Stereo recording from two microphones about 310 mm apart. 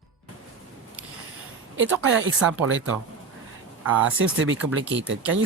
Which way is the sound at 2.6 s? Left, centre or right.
Right.